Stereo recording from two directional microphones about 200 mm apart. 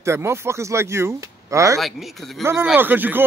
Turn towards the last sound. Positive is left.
turn(degrees=-10)  # may be behind; listen again after turning